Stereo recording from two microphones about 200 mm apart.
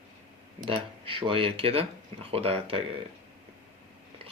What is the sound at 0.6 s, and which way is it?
Speech, 25° right (ahead or behind).